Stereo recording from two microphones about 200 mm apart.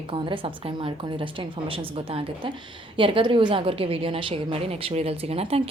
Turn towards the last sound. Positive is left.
turn(degrees=-30)  # may be behind; listen again after turning